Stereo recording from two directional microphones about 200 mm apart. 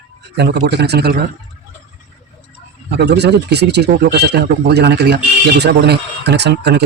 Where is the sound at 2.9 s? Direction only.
55° right (ahead or behind).